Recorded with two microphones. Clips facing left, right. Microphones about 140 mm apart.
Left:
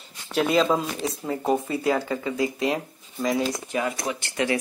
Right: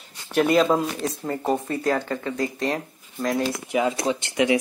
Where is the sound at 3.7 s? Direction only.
20° right (ahead or behind).